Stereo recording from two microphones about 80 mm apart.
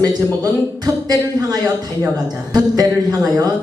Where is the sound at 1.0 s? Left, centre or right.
Right.